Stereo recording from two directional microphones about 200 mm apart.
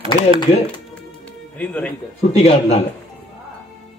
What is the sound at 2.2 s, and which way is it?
Speech, 30° left (ahead or behind).